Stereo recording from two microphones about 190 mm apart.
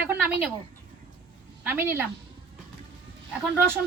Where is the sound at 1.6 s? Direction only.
10° right (ahead or behind).